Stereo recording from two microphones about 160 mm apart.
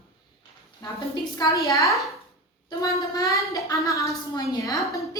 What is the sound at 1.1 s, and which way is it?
Speech, 20° left (ahead or behind).